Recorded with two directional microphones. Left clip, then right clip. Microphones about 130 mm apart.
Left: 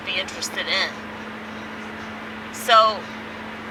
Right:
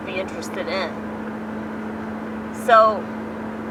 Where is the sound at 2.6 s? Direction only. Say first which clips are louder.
Right 1 dB; 25° left (ahead or behind).